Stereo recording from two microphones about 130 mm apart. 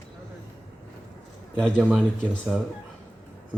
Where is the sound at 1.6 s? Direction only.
5° left (ahead or behind).